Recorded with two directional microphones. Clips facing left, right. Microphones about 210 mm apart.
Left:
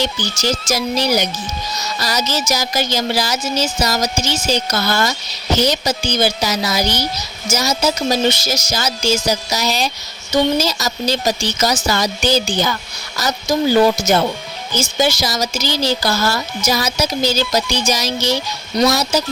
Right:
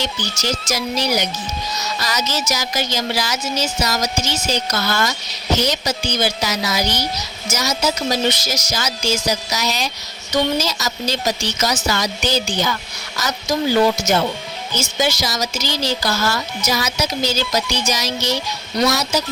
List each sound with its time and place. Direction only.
0.0 s speech: 30° left (ahead or behind)
2.0 s a sound: 35° left (ahead or behind)
2.3 s speech: 30° left (ahead or behind)